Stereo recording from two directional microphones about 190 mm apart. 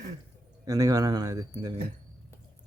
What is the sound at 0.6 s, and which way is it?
Speech, 20° right (ahead or behind).